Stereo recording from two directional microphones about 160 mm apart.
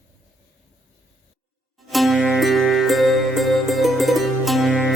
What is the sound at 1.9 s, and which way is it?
Music, centre (ahead or behind).